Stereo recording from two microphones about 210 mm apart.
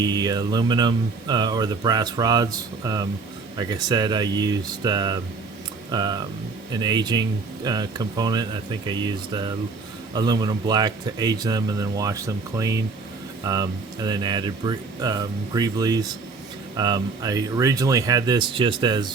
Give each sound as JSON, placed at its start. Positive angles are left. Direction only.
{"t": 0.0, "sound": "speech", "side_deg": -20}